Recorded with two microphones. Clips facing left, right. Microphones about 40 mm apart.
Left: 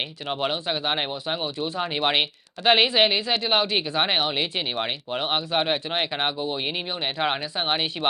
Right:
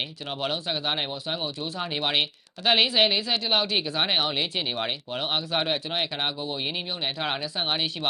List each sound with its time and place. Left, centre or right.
0.3 s speech: centre